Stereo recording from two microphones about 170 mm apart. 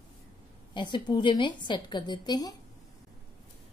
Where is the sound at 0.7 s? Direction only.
25° left (ahead or behind).